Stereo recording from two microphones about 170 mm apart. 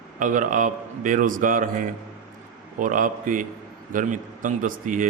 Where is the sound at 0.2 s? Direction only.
50° right (ahead or behind).